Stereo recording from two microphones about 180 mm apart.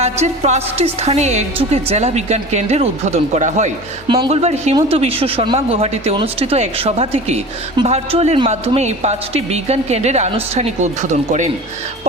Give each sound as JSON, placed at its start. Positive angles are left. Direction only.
{"t": 0.0, "sound": "a woman's voice", "side_deg": -40}